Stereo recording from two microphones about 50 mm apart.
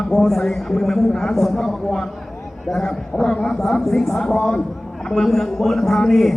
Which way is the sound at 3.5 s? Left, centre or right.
Centre.